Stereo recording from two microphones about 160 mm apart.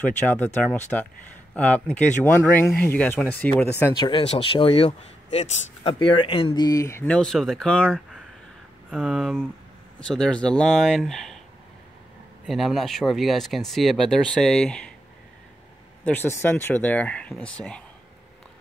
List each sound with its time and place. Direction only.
0.6 s speech: 10° left (ahead or behind)
4.0 s speech: 35° left (ahead or behind); by 11.3 s centre (ahead or behind)
12.4 s speech: centre (ahead or behind)
16.1 s speech: 15° left (ahead or behind)